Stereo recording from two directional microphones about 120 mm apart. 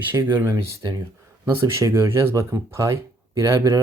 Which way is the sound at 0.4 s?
35° right (ahead or behind).